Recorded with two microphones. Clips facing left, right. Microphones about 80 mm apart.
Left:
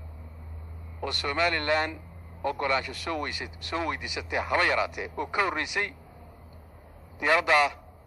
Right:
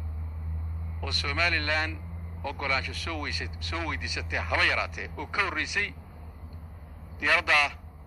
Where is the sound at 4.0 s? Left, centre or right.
Centre.